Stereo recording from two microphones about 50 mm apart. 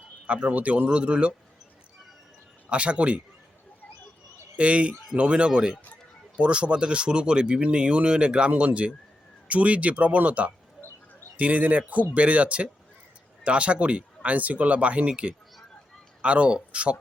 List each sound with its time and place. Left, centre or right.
0.3 s speech: right
2.6 s speech: right
4.5 s speech: right